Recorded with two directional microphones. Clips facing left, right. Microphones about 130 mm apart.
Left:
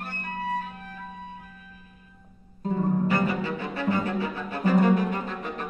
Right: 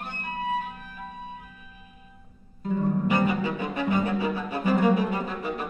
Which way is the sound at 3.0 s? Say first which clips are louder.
Right 1 dB; 15° right (ahead or behind).